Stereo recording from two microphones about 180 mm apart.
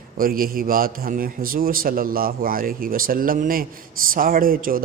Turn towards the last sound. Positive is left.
turn(degrees=-55)  # may be behind; listen again after turning